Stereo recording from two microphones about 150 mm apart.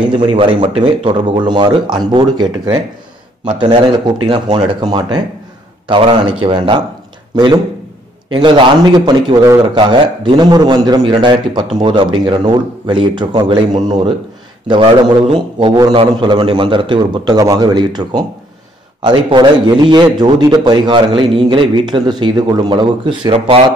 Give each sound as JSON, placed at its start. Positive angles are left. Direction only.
{"t": 0.1, "sound": "a man's voice", "side_deg": -30}
{"t": 15.7, "sound": "a man's voice", "side_deg": -25}